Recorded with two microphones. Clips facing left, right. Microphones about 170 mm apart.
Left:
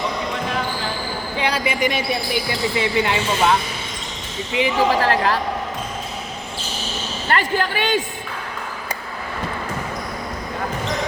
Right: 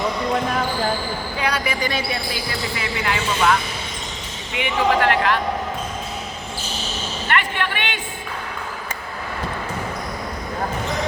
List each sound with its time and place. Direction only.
1.4 s speech: 25° left (ahead or behind)
7.3 s a woman's voice: 35° left (ahead or behind)